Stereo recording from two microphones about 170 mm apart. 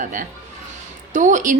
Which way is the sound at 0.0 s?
50° right (ahead or behind).